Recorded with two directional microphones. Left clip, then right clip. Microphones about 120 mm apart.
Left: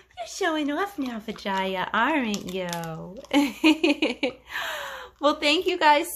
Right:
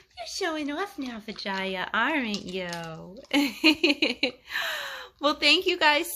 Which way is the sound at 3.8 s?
20° right (ahead or behind).